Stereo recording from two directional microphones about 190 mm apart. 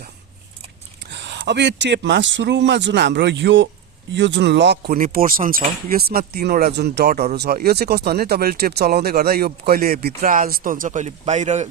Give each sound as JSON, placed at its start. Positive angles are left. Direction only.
{"t": 1.1, "sound": "a man's voice", "side_deg": -65}